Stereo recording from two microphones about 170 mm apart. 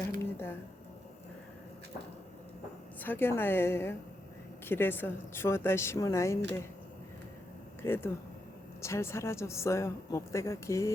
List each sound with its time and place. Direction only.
0.2 s a sound: 15° left (ahead or behind)
3.0 s a woman's voice: 10° left (ahead or behind)
7.8 s a woman's voice: 15° left (ahead or behind)